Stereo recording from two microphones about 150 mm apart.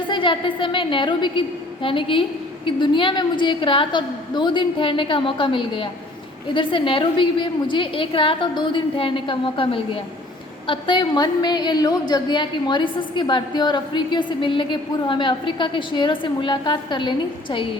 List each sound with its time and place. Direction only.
0.1 s a woman's voice: 35° left (ahead or behind)